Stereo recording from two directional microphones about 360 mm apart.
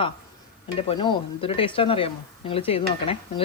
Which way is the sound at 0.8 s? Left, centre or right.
Centre.